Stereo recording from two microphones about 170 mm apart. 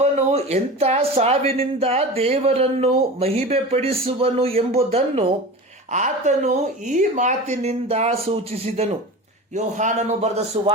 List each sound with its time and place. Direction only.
0.0 s a man's voice: 40° right (ahead or behind)